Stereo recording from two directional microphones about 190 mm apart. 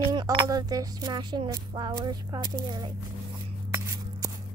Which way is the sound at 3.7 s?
20° right (ahead or behind).